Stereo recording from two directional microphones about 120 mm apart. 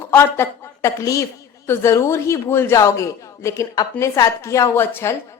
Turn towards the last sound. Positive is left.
turn(degrees=20)  # may be behind; listen again after turning